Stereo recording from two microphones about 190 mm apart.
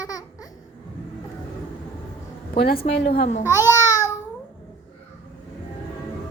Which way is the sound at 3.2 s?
35° left (ahead or behind).